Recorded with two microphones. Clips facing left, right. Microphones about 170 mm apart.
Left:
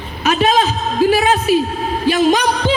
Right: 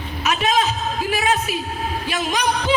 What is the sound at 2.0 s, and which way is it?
Speech, 30° left (ahead or behind).